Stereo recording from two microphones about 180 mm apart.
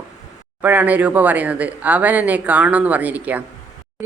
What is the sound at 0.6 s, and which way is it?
Speech, 10° right (ahead or behind).